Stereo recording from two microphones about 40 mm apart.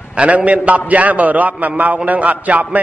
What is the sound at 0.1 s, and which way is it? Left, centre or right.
A man's voice, right.